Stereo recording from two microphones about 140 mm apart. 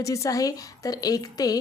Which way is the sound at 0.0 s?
25° left (ahead or behind).